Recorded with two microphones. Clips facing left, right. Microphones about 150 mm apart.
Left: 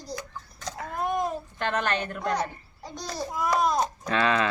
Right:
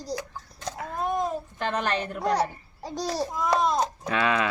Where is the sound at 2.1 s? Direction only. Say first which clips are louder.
Right 3 dB; 35° right (ahead or behind).